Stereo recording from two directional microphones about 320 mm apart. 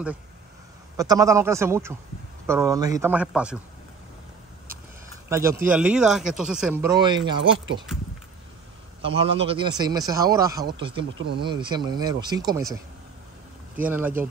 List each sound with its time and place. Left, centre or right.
0.9 s speech: centre
5.3 s speech: centre
9.0 s speech: centre
11.1 s speech: right
11.4 s speech: centre
13.8 s speech: centre